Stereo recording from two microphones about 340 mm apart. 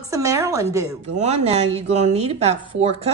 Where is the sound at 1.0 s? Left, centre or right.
Centre.